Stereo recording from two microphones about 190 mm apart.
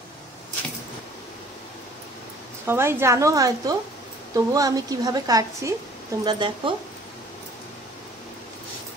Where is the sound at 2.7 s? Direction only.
15° right (ahead or behind).